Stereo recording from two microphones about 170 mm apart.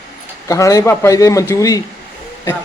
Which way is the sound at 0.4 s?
20° left (ahead or behind).